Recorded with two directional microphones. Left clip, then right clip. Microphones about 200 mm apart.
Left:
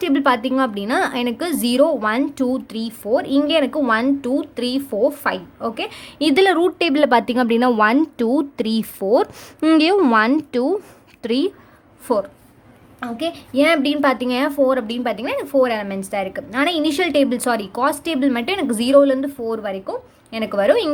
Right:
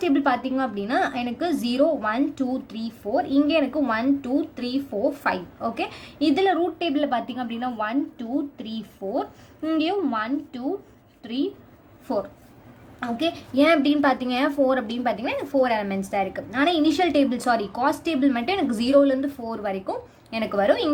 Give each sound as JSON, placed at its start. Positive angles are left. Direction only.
{"t": 0.0, "sound": "a woman's voice", "side_deg": 35}
{"t": 12.1, "sound": "a woman's voice", "side_deg": 40}
{"t": 13.0, "sound": "a woman's voice", "side_deg": 15}